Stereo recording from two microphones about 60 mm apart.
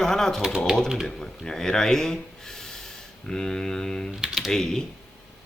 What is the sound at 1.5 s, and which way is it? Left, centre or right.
Speech, centre.